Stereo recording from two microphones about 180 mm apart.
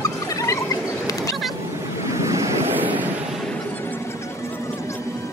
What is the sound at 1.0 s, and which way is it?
Cat, 20° left (ahead or behind).